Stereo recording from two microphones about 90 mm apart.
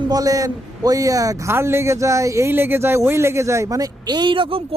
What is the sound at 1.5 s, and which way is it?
Speech, 30° right (ahead or behind).